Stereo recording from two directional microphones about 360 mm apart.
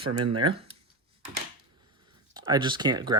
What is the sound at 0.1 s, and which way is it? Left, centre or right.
Speech, right.